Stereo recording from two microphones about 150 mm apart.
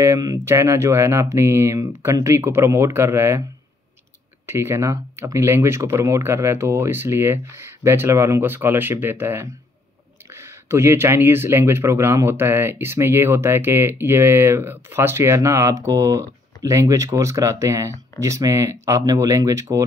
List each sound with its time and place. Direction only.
0.0 s speech: 20° right (ahead or behind)
4.5 s speech: 15° right (ahead or behind)